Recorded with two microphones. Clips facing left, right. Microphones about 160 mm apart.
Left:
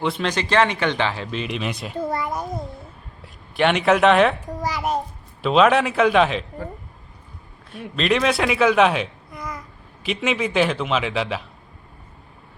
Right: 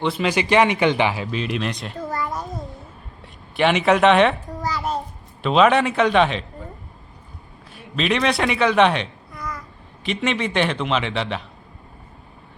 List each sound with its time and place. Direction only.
0.0 s speech: 5° right (ahead or behind)
2.2 s a sound: 15° left (ahead or behind)
3.2 s speech: centre (ahead or behind)
4.6 s babbling: 15° left (ahead or behind)
5.4 s a man's voice: centre (ahead or behind)
7.7 s a man's voice: centre (ahead or behind)
9.3 s a sound: 20° left (ahead or behind)
10.0 s a man's voice: 5° left (ahead or behind)